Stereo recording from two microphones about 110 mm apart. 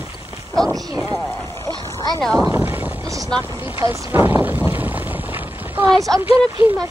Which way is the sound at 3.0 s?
30° right (ahead or behind).